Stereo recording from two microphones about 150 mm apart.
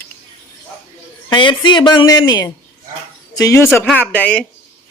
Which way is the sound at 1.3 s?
30° left (ahead or behind).